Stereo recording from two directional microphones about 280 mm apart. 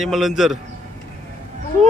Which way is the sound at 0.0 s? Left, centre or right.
Centre.